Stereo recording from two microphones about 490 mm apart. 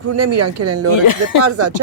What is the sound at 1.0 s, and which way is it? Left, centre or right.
Speech, left.